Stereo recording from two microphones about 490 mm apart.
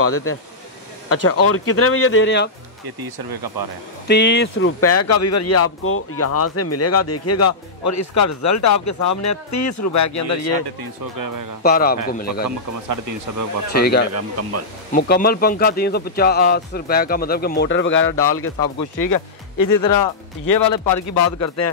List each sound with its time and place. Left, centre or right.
0.0 s speech: left
3.0 s speech: right
4.1 s speech: left
11.1 s speech: right
11.6 s a man's voice: centre
12.4 s speech: right
13.7 s speech: centre
14.1 s speech: right
14.9 s speech: centre
18.9 s speech: left